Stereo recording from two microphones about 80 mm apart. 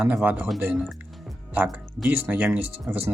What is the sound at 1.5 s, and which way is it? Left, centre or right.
Speech, right.